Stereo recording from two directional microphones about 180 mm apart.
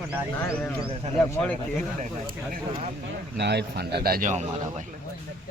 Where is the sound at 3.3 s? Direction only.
70° right (ahead or behind).